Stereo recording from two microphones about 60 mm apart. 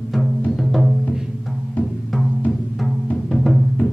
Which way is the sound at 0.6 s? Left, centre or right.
Centre.